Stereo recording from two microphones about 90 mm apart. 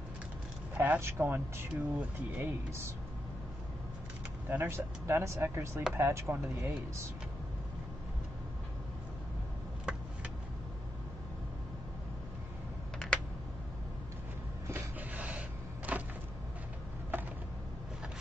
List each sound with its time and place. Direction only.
0.7 s speech: 20° right (ahead or behind)
4.5 s speech: 25° right (ahead or behind)
6.3 s speech: 15° right (ahead or behind)
14.7 s a sound: 20° right (ahead or behind)